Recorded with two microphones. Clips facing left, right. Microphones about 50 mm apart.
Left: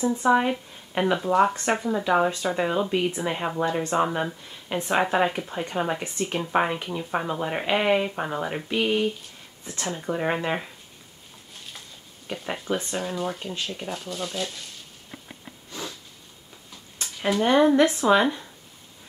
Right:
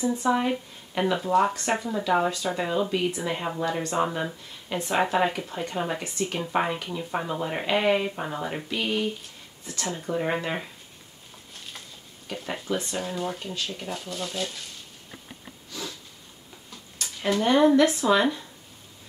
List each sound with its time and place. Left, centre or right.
0.2 s speech: centre
6.0 s speech: left
6.5 s speech: centre
9.7 s speech: left
10.0 s speech: centre
12.3 s speech: centre
12.7 s speech: left
13.0 s speech: centre
15.8 s speech: left
17.4 s speech: centre
17.7 s speech: left